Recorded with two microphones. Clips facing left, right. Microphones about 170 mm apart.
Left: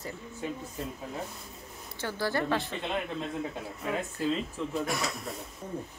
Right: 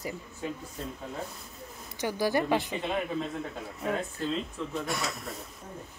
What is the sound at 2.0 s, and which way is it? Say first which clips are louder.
Speech: right 3 dB; 15° right (ahead or behind).